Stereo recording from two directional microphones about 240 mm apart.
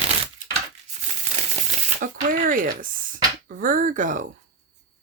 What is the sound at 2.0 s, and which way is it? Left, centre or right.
Speech, right.